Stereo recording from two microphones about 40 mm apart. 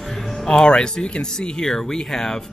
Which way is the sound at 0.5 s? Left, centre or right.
Centre.